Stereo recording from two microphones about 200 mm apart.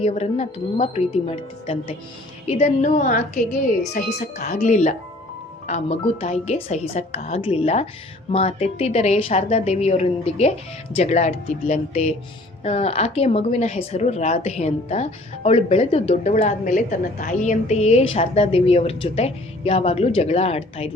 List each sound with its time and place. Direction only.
0.0 s a woman's voice: 35° left (ahead or behind)